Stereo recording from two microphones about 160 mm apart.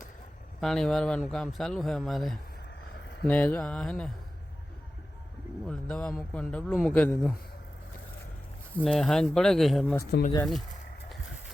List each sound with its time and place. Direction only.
0.6 s a man's voice: 5° left (ahead or behind)
5.6 s a man's voice: 5° left (ahead or behind)
8.8 s speech: 5° left (ahead or behind)
10.1 s speech: 70° left (ahead or behind)